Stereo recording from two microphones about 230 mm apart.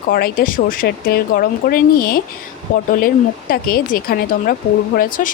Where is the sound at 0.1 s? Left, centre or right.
Left.